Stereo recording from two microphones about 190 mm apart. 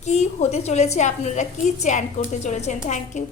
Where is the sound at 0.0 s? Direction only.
35° left (ahead or behind).